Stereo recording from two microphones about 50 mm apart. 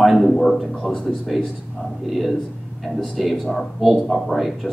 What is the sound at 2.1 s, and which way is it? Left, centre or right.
Speech, centre.